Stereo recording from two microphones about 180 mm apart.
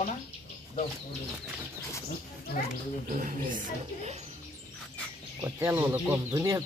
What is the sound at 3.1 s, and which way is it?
Speech, 45° right (ahead or behind).